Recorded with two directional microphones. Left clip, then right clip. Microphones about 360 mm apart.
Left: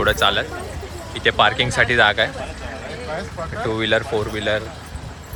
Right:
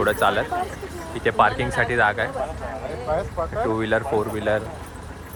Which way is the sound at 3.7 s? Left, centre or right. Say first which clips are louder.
Left 5 dB; centre.